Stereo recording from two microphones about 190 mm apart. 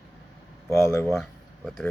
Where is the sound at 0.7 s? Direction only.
15° left (ahead or behind).